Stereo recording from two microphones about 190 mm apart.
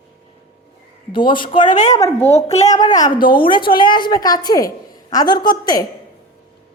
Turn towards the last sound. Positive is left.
turn(degrees=20)  # may be behind; listen again after turning